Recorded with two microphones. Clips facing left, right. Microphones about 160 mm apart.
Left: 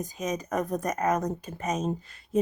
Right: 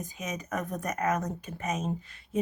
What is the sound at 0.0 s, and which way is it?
Speech, 35° left (ahead or behind).